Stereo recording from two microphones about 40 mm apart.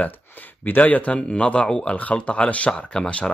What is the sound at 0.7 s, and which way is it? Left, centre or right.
Speech, left.